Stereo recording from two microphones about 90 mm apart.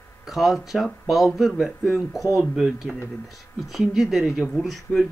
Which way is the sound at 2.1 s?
Centre (ahead or behind).